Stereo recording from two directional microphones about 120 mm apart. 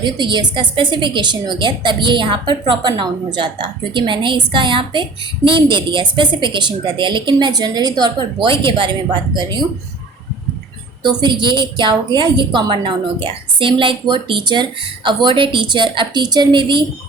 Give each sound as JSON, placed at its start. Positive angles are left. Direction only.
{"t": 0.0, "sound": "a woman's voice", "side_deg": -40}
{"t": 11.0, "sound": "a woman's voice", "side_deg": -35}